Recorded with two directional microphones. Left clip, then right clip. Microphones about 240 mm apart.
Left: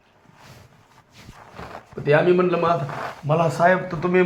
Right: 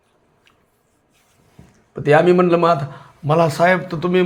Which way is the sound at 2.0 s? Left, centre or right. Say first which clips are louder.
Right 4 dB; right.